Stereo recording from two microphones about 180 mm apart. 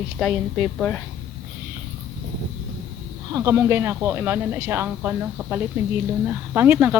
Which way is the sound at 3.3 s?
15° right (ahead or behind).